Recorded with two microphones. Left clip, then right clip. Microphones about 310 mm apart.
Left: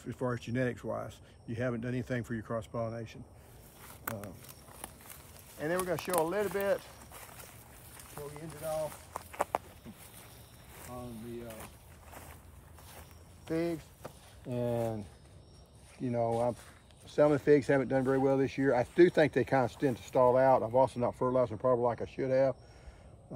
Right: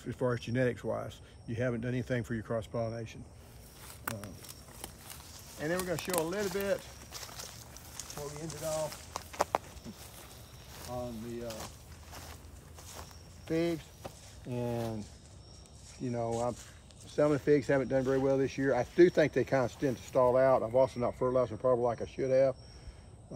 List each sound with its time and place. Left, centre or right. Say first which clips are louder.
0.0 s speech: right 3 dB; centre
3.8 s a sound: even; centre
4.8 s speech: right 2 dB; centre
7.2 s boat: right 8 dB; centre
8.1 s speech: right 2 dB; centre
9.1 s a sound: right 2 dB; centre
10.7 s speech: right 6 dB; centre
13.5 s speech: right 2 dB; centre
14.5 s speech: left 3 dB; left